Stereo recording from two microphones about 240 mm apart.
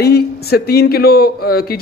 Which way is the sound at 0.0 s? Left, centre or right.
Left.